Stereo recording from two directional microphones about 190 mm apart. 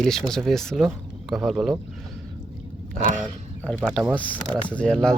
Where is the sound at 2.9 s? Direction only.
40° right (ahead or behind).